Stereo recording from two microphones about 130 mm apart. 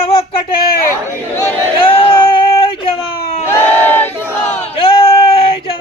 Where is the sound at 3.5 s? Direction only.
15° left (ahead or behind).